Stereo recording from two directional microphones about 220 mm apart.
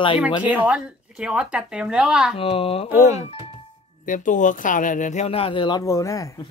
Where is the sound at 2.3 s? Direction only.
25° left (ahead or behind).